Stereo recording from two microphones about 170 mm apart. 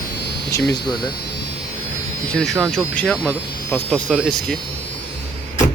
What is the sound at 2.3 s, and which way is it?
Speech, 5° left (ahead or behind).